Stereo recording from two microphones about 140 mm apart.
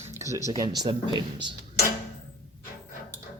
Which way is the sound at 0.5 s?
25° right (ahead or behind).